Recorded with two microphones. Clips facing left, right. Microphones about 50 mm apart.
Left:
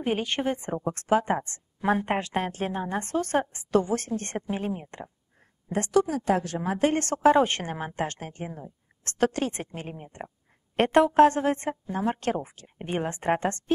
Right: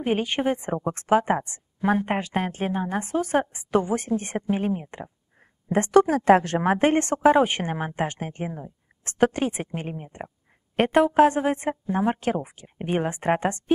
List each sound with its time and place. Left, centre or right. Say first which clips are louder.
0.0 s a woman's voice: right 3 dB; centre
1.8 s a woman's voice: right 2 dB; centre
5.7 s a woman's voice: right 6 dB; right
5.9 s a woman's voice: right 7 dB; right
6.8 s speech: even; right
7.2 s a woman's voice: left 1 dB; centre
11.2 s a woman's voice: right 1 dB; centre